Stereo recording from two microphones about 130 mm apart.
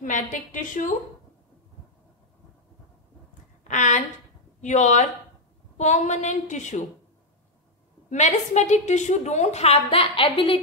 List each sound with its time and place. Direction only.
0.0 s a woman's voice: 80° left
3.6 s a woman's voice: 65° left (ahead or behind)
8.1 s a woman's voice: 65° left (ahead or behind); by 10.6 s 45° left (ahead or behind)